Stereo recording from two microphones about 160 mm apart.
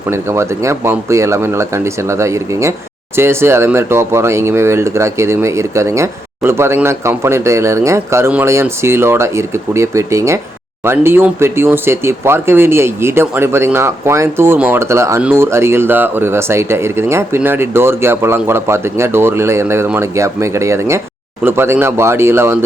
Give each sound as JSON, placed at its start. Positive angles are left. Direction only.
{"t": 0.1, "sound": "speech", "side_deg": -15}